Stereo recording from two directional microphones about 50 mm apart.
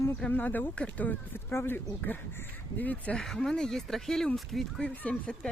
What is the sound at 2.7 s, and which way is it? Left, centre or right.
Speech, left.